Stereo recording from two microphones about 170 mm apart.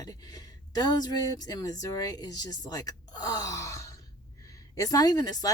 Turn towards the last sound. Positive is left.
turn(degrees=25)  # may be behind; listen again after turning